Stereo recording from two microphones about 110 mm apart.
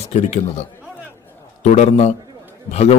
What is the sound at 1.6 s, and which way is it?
A man's voice, 90° left.